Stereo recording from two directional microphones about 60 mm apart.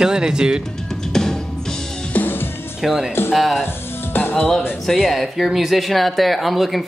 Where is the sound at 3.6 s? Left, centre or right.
Left.